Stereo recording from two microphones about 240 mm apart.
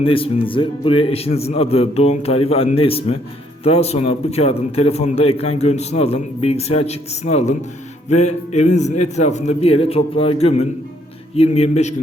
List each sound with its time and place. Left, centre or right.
0.0 s a man's voice: left